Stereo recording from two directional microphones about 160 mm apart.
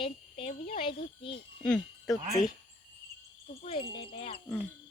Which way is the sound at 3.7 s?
35° left (ahead or behind).